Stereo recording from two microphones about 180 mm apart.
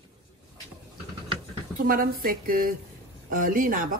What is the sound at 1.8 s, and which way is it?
Speech, 55° right (ahead or behind).